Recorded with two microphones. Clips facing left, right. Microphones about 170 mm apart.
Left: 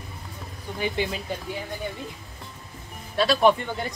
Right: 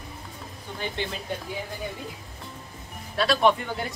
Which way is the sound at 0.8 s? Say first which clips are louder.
Left 4 dB; 10° left (ahead or behind).